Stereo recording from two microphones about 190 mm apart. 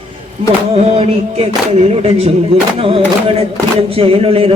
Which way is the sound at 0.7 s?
30° right (ahead or behind).